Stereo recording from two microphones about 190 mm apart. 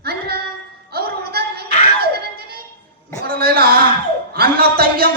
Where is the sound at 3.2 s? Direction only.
50° right (ahead or behind).